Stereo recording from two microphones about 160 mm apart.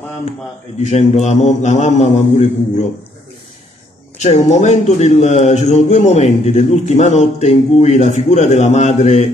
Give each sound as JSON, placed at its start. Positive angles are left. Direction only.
{"t": 0.8, "sound": "a man's voice", "side_deg": 45}
{"t": 4.2, "sound": "a man's voice", "side_deg": 45}